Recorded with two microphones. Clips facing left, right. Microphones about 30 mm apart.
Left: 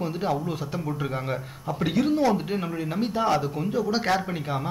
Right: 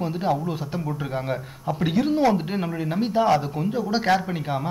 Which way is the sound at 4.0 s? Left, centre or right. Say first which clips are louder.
Right 6 dB; centre.